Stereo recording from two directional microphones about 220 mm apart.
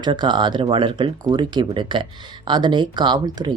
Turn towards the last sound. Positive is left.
turn(degrees=-20)  # may be behind; listen again after turning